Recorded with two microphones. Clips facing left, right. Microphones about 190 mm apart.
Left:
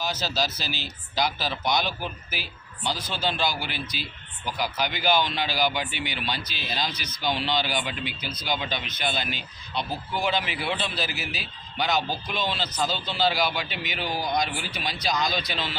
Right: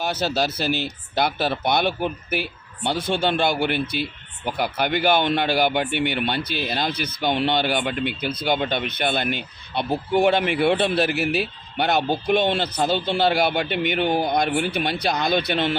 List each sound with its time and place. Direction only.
0.0 s speech: 60° right (ahead or behind)